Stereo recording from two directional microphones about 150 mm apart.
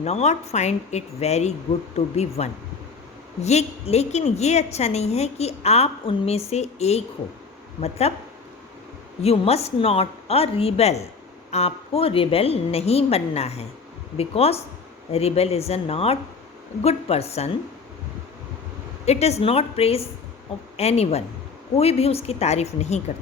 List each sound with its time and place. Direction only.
0.0 s a woman's voice: 45° left (ahead or behind)
9.2 s a woman's voice: 40° left (ahead or behind)
19.0 s a woman's voice: 45° left (ahead or behind)